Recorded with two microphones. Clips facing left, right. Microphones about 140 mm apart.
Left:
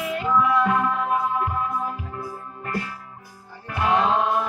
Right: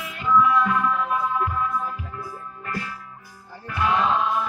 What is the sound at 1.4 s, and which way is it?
Music, 50° left (ahead or behind).